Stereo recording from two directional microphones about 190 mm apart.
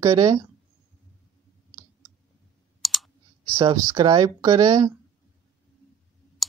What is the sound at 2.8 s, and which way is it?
Clicking, centre (ahead or behind).